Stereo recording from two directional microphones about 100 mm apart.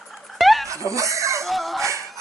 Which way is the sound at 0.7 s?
30° right (ahead or behind).